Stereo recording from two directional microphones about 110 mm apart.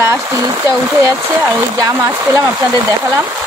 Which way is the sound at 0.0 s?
25° right (ahead or behind).